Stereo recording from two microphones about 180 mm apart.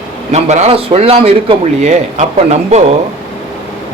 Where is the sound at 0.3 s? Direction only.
40° right (ahead or behind).